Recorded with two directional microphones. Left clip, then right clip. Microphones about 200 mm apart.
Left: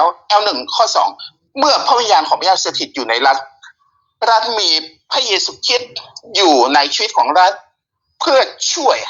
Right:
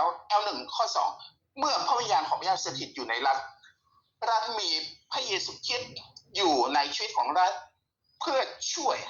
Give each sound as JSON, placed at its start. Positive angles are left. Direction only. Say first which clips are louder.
{"t": 0.0, "sound": "speech", "louder": "left 14 dB", "side_deg": 50}